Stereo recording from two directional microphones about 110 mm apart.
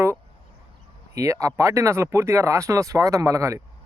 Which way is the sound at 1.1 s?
30° right (ahead or behind).